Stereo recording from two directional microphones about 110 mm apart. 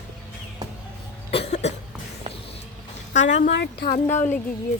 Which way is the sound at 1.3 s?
65° left (ahead or behind).